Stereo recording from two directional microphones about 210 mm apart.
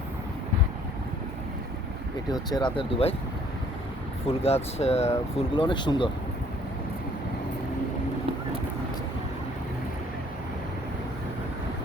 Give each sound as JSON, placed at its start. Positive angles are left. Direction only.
{"t": 2.3, "sound": "speech", "side_deg": 20}
{"t": 4.3, "sound": "speech", "side_deg": 30}